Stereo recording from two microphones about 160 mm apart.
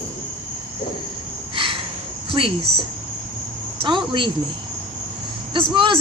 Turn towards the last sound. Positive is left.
turn(degrees=-30)  # may be behind; listen again after turning